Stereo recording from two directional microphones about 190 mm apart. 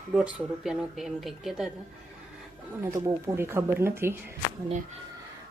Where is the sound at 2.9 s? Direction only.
15° right (ahead or behind).